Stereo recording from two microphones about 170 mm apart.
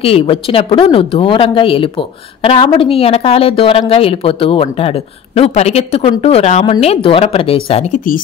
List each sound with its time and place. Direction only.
0.0 s speech: 35° left (ahead or behind)